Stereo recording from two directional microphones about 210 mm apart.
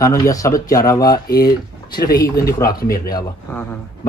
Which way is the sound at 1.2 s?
45° left (ahead or behind).